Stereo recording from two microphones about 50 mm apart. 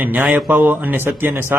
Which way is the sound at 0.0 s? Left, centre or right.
Right.